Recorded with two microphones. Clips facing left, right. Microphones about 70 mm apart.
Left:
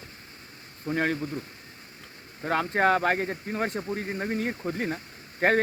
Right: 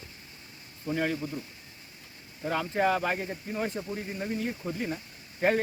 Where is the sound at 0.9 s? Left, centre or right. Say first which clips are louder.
Left 3 dB; left.